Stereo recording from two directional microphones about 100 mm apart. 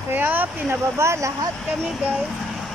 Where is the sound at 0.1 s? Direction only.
20° right (ahead or behind).